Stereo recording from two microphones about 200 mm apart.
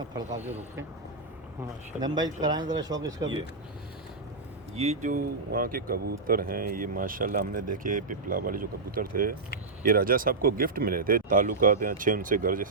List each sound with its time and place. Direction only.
0.3 s speech: 35° right (ahead or behind)
2.1 s speech: 20° right (ahead or behind)
4.8 s speech: 35° right (ahead or behind)